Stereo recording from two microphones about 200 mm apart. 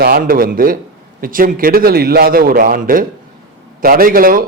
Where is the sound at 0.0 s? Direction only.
50° right (ahead or behind).